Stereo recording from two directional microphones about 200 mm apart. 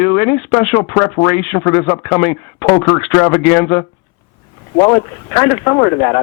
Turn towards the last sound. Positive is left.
turn(degrees=15)  # may be behind; listen again after turning